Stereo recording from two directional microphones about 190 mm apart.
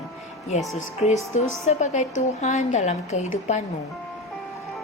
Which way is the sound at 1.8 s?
40° left (ahead or behind).